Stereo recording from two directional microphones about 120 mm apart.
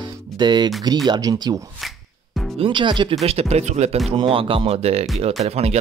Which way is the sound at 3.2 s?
60° right (ahead or behind).